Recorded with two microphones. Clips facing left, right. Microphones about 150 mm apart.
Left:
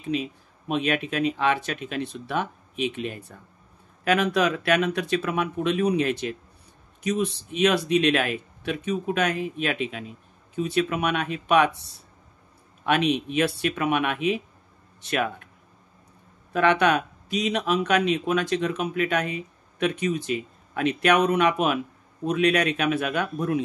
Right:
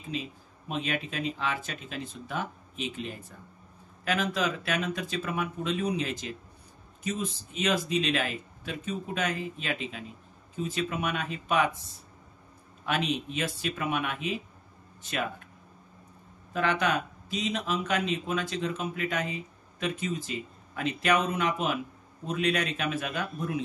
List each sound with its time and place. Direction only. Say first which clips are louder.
0.1 s speech: left 8 dB; 70° left (ahead or behind)
12.8 s speech: left 7 dB; 65° left (ahead or behind)
16.5 s speech: left 7 dB; 70° left (ahead or behind)